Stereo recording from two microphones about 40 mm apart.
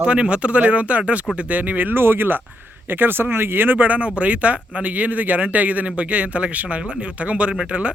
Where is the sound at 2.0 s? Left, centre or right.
Right.